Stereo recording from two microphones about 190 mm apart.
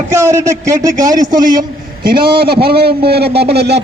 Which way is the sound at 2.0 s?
55° right (ahead or behind).